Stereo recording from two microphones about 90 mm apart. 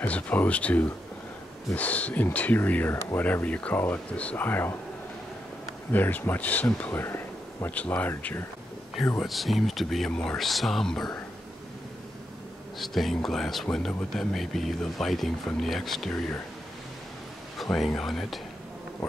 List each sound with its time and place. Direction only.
0.0 s speech: 15° left (ahead or behind)
5.9 s speech: 20° left (ahead or behind)
9.2 s speech: centre (ahead or behind)
12.7 s speech: centre (ahead or behind)
17.6 s speech: centre (ahead or behind)